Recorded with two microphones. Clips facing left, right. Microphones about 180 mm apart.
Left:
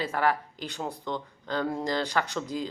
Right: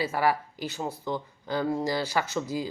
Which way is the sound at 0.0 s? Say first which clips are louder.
Right 1 dB; 10° right (ahead or behind).